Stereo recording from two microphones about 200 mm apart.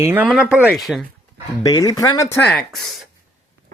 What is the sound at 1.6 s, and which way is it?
Speech, 20° left (ahead or behind).